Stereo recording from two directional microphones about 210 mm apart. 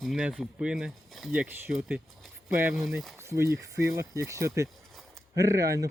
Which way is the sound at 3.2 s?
15° right (ahead or behind).